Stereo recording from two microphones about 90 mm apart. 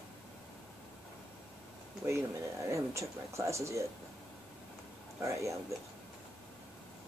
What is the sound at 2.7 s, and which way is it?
Speech, 35° right (ahead or behind).